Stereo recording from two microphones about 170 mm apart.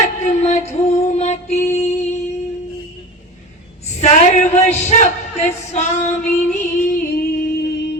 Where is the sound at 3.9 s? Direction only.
40° left (ahead or behind).